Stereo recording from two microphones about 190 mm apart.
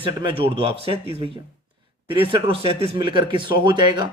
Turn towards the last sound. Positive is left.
turn(degrees=-25)  # may be behind; listen again after turning